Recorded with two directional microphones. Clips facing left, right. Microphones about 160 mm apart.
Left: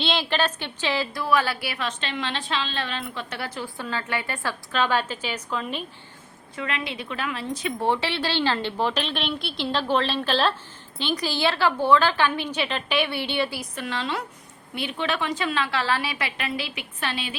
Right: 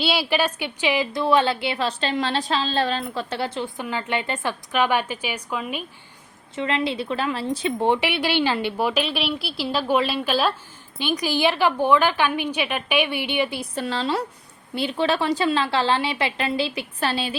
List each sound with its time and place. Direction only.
0.0 s a woman's voice: 10° right (ahead or behind)
6.6 s a woman's voice: 30° right (ahead or behind)
7.8 s a woman's voice: 15° right (ahead or behind)
13.6 s a woman's voice: 30° right (ahead or behind)